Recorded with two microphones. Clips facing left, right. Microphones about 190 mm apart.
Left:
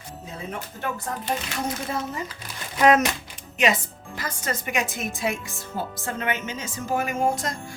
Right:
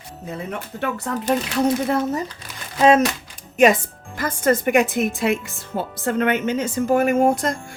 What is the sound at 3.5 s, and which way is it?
Speech, 50° right (ahead or behind).